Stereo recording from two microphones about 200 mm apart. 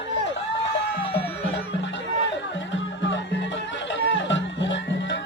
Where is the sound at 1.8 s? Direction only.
65° left (ahead or behind).